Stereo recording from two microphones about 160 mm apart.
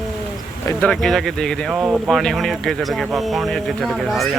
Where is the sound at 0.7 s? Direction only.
10° left (ahead or behind).